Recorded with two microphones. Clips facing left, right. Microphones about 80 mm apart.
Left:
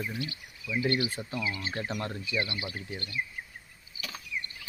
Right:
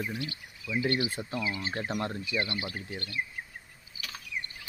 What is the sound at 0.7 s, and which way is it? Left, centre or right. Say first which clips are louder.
Speech: even; right.